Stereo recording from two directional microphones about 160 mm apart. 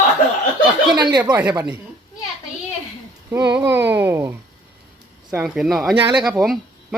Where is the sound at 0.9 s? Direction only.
25° right (ahead or behind).